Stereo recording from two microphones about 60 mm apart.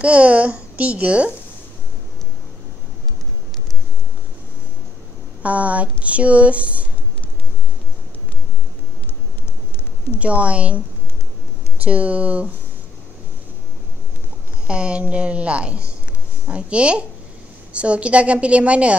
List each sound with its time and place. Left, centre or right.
0.0 s speech: right
5.4 s speech: right
10.1 s speech: right
11.8 s speech: right
14.7 s speech: centre